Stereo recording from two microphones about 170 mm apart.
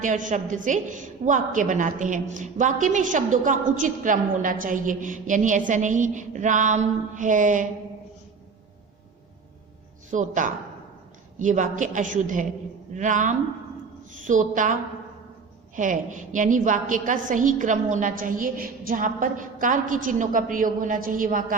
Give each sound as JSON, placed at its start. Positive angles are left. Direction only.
{"t": 0.0, "sound": "a woman's voice", "side_deg": -50}
{"t": 10.1, "sound": "a woman's voice", "side_deg": -45}